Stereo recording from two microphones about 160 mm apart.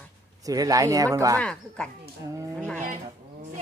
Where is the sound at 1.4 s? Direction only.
5° left (ahead or behind).